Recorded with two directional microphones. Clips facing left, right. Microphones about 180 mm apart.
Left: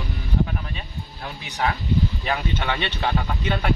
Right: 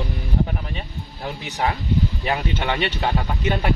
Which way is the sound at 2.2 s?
15° right (ahead or behind).